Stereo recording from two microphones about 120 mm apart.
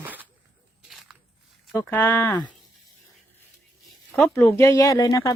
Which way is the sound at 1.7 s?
20° left (ahead or behind).